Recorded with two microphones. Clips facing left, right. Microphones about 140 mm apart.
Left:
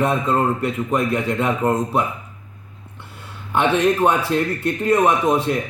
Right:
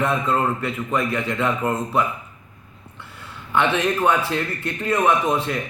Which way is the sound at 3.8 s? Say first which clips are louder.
Left 3 dB; 20° left (ahead or behind).